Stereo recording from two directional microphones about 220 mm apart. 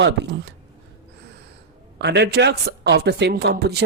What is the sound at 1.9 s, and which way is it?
Speech, 50° right (ahead or behind).